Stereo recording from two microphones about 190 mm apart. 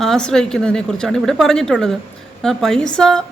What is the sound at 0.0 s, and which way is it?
Speech, 5° left (ahead or behind).